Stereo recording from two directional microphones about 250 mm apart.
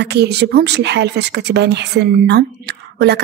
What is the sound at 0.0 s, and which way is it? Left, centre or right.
A woman's voice, right.